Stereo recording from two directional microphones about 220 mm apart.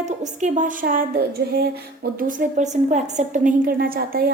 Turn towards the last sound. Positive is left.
turn(degrees=-45)  # may be behind; listen again after turning